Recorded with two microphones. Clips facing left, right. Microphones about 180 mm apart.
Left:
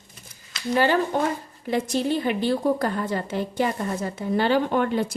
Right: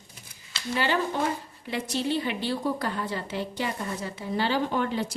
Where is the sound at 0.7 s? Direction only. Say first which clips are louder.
Left 6 dB; 45° left (ahead or behind).